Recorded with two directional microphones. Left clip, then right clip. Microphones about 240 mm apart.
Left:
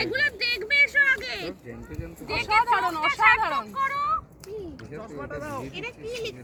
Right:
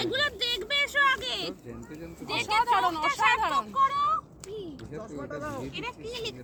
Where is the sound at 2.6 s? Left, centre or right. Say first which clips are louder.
Left 2 dB; left.